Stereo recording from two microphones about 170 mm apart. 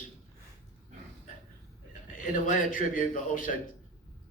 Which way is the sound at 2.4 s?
50° left (ahead or behind).